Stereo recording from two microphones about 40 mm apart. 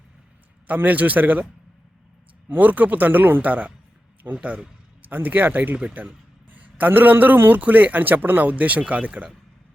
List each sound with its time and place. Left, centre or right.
0.9 s speech: right
2.5 s speech: right
3.4 s speech: right
5.0 s a man's voice: right
8.4 s speech: right